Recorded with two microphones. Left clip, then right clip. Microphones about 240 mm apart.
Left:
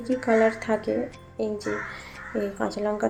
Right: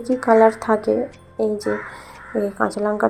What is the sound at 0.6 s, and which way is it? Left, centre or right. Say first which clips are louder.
Speech: right 7 dB; centre.